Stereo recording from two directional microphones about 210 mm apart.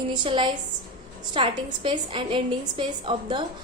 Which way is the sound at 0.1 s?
25° right (ahead or behind).